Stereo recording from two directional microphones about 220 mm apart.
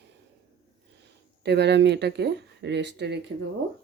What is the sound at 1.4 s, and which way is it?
Speech, 50° right (ahead or behind).